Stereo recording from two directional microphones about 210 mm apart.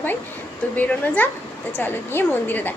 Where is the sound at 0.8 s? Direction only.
5° left (ahead or behind).